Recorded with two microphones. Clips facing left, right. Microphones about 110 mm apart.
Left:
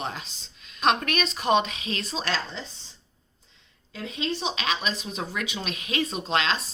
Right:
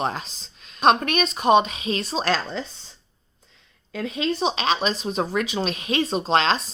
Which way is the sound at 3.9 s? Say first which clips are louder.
Right 5 dB; 50° right (ahead or behind).